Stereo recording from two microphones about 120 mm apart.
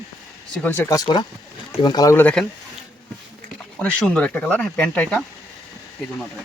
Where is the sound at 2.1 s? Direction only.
10° left (ahead or behind).